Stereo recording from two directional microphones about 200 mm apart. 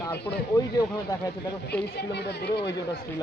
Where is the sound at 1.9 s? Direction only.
55° left (ahead or behind).